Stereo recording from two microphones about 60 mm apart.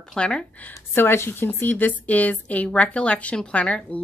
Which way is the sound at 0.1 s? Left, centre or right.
Centre.